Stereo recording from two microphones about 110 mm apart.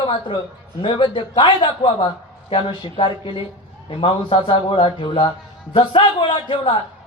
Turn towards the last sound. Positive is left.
turn(degrees=55)  # may be behind; listen again after turning